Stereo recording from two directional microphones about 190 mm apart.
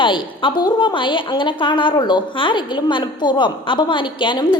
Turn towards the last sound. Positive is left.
turn(degrees=25)  # may be behind; listen again after turning